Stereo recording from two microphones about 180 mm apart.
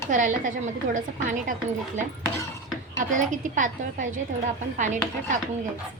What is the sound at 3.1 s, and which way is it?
A woman's voice, 45° right (ahead or behind).